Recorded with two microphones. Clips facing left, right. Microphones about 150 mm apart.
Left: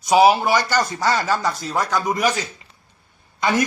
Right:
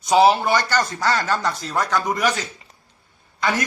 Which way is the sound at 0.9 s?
15° left (ahead or behind).